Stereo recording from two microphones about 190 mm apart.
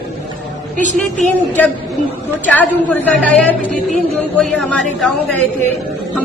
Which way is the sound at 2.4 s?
10° left (ahead or behind).